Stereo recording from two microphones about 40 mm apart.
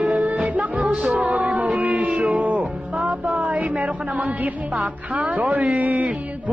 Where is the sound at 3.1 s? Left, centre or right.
Right.